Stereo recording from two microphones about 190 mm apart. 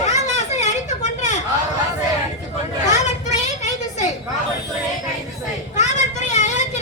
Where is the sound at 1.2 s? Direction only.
40° left (ahead or behind).